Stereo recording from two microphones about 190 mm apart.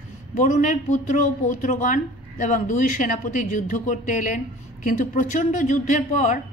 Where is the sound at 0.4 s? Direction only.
40° left (ahead or behind).